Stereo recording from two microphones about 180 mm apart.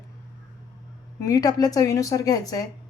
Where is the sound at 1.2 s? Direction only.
20° left (ahead or behind).